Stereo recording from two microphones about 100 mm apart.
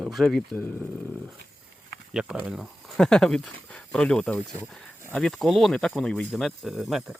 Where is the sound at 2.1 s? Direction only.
10° right (ahead or behind).